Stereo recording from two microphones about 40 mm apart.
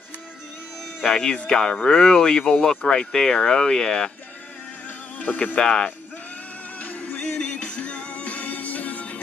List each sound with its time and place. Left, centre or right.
1.3 s speech: left
5.2 s speech: left
5.6 s speech: centre
6.8 s music: left
7.2 s music: left